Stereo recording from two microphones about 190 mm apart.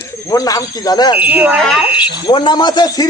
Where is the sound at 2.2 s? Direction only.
25° left (ahead or behind).